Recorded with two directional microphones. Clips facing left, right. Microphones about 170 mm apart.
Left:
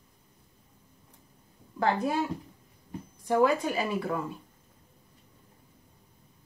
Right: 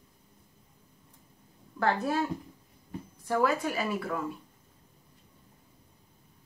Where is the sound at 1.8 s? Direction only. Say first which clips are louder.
Left 1 dB; 15° left (ahead or behind).